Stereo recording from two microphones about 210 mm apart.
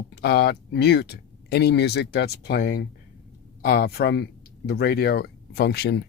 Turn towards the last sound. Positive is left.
turn(degrees=50)  # may be behind; listen again after turning